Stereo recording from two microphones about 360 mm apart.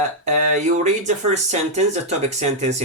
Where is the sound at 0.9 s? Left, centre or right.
Centre.